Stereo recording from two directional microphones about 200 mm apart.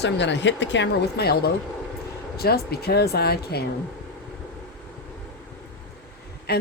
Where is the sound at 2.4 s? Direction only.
50° left (ahead or behind).